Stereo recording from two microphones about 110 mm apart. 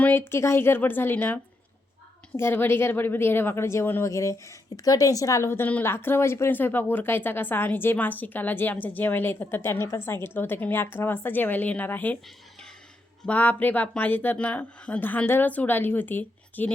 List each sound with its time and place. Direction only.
0.0 s speech: 20° left (ahead or behind)
13.2 s speech: 15° left (ahead or behind)